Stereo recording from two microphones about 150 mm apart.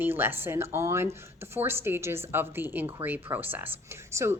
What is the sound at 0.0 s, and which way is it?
Speech, 15° right (ahead or behind).